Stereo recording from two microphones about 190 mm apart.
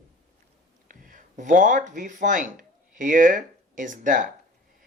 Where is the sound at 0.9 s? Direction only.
45° right (ahead or behind).